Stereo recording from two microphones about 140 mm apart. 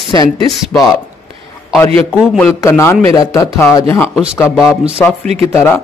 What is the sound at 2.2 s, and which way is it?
Speech, centre (ahead or behind).